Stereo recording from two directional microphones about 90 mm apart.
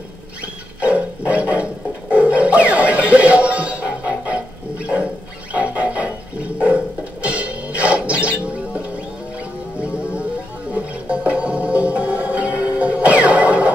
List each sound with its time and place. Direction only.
0.7 s music: 15° right (ahead or behind)